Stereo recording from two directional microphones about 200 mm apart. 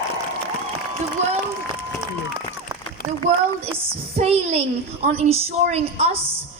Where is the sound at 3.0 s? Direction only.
45° left (ahead or behind).